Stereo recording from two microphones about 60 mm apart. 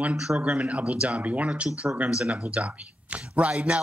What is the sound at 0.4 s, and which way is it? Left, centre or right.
A man's voice, right.